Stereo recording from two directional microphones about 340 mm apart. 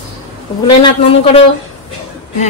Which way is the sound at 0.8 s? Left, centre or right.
Centre.